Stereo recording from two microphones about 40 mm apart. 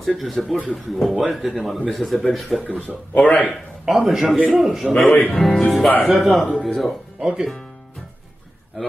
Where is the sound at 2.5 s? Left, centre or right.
Centre.